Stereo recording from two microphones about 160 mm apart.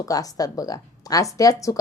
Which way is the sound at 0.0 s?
20° left (ahead or behind).